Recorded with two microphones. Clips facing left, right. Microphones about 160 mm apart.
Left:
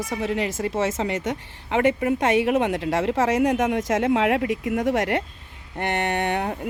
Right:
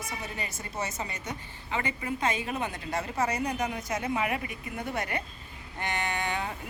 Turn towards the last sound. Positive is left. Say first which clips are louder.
# left 8 dB
turn(degrees=65)  # may be behind; listen again after turning